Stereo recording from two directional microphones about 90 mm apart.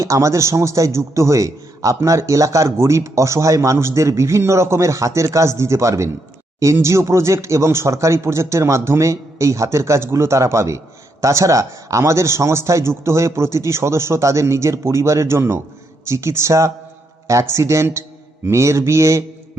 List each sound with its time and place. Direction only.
0.0 s a man's voice: 35° right (ahead or behind)